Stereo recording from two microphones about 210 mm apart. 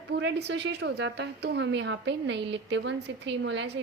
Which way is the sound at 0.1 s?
55° right (ahead or behind).